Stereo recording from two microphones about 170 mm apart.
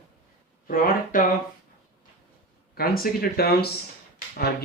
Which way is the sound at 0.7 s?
55° left (ahead or behind).